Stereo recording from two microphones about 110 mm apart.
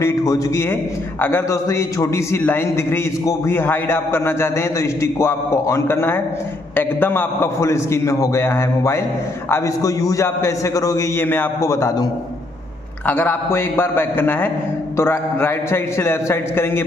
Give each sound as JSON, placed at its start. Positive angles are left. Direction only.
{"t": 0.0, "sound": "a man's voice", "side_deg": 30}
{"t": 13.0, "sound": "a man's voice", "side_deg": 15}